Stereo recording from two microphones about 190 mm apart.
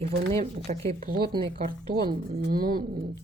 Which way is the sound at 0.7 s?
45° right (ahead or behind).